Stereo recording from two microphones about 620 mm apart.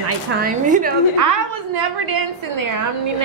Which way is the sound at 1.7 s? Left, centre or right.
Right.